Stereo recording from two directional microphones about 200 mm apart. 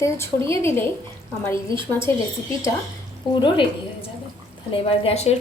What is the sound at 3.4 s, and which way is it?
Speech, 25° left (ahead or behind).